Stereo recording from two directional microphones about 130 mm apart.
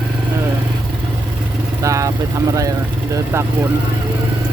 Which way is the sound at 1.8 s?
25° right (ahead or behind).